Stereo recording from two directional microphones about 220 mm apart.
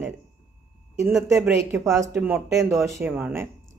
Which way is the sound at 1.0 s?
Centre (ahead or behind).